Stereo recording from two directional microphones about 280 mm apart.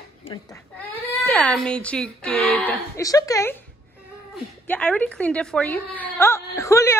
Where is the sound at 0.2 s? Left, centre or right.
Centre.